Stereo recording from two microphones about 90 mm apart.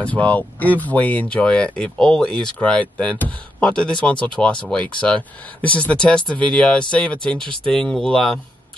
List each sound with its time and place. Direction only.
0.0 s speech: 15° left (ahead or behind)